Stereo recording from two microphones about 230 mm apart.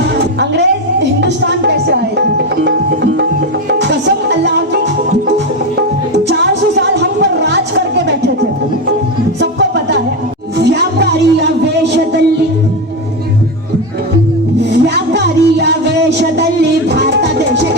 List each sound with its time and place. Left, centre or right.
0.3 s speech: right
2.6 s tabla: right
3.7 s music: right
6.2 s a sound: right
9.4 s music: right
10.6 s a sound: right
14.7 s music: right